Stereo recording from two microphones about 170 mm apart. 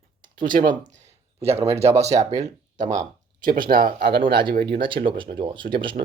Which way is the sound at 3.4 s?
55° right (ahead or behind).